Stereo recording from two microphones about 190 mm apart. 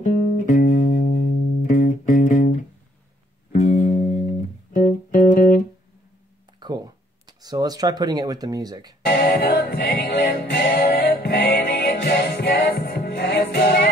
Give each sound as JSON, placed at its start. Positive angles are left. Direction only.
{"t": 0.0, "sound": "music", "side_deg": 45}
{"t": 3.5, "sound": "music", "side_deg": 35}
{"t": 7.2, "sound": "speech", "side_deg": -20}
{"t": 9.0, "sound": "music", "side_deg": 55}